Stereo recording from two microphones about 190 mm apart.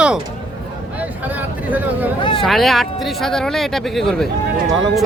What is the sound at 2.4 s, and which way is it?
Speech, centre (ahead or behind).